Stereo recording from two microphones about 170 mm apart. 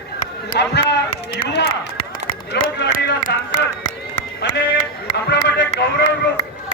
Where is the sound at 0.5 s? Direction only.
85° left.